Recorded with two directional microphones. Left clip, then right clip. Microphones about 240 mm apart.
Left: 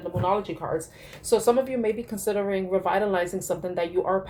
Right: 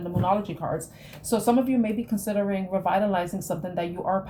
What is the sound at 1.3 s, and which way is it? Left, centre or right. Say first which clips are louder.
A woman's voice: left 2 dB; left.